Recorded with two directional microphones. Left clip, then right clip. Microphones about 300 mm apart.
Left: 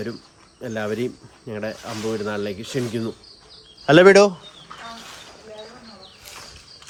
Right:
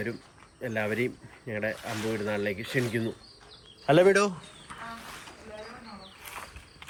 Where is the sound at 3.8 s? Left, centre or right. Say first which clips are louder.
Left 9 dB; left.